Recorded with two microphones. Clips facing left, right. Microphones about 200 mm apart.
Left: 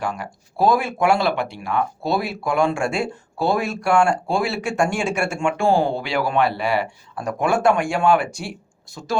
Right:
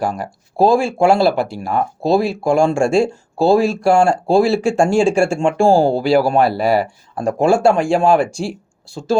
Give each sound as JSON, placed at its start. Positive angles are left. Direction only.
{"t": 0.0, "sound": "speech", "side_deg": -35}
{"t": 2.0, "sound": "speech", "side_deg": -25}